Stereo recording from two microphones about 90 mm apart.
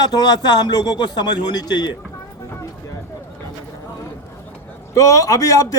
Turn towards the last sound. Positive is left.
turn(degrees=35)  # may be behind; listen again after turning